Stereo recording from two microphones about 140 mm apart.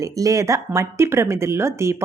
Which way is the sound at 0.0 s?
25° right (ahead or behind).